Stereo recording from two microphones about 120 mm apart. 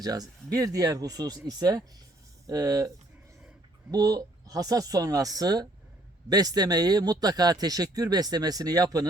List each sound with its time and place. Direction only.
0.0 s a man's voice: 30° right (ahead or behind)
3.9 s a man's voice: 30° right (ahead or behind)